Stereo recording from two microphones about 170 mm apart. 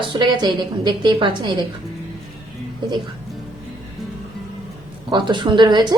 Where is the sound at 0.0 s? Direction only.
30° right (ahead or behind).